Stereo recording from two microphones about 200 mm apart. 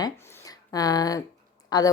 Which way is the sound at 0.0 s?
15° left (ahead or behind).